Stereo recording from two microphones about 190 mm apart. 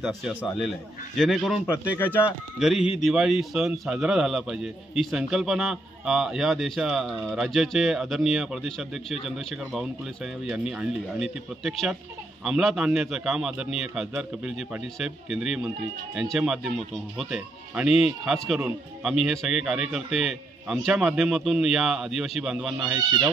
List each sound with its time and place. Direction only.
0.0 s a man's voice: 5° right (ahead or behind)
2.6 s a man's voice: 5° right (ahead or behind)